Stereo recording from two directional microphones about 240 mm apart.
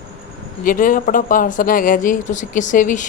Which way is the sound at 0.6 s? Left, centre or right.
Left.